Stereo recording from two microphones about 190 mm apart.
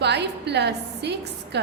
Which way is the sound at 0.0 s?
60° right (ahead or behind).